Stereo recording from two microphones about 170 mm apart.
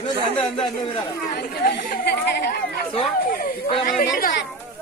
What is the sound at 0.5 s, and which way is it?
Speech, 25° left (ahead or behind).